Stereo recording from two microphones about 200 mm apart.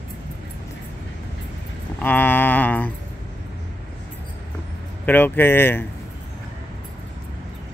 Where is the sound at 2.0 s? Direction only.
10° left (ahead or behind).